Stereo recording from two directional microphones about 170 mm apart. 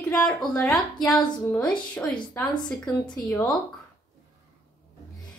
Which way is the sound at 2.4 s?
15° left (ahead or behind).